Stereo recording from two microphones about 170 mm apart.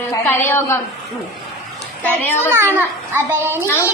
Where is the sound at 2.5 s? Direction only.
15° right (ahead or behind).